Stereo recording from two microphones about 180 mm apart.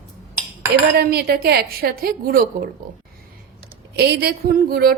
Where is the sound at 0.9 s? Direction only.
60° right (ahead or behind).